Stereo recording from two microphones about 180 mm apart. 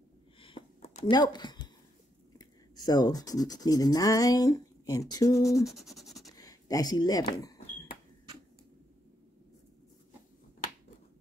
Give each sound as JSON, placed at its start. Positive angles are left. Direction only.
{"t": 0.4, "sound": "a sound", "side_deg": 30}
{"t": 1.1, "sound": "speech", "side_deg": 25}
{"t": 5.7, "sound": "sanding", "side_deg": 0}
{"t": 6.3, "sound": "speech", "side_deg": 20}